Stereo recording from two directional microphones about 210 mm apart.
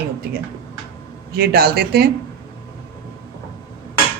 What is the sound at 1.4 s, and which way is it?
Speech, 45° right (ahead or behind).